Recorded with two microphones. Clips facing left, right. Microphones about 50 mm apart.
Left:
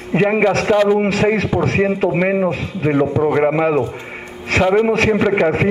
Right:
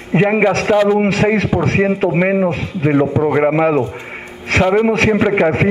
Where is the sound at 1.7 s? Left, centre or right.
Centre.